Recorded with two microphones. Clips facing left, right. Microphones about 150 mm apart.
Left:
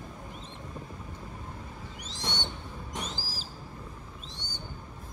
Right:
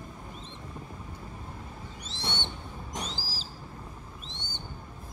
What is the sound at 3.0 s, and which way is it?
Owl, 50° left (ahead or behind).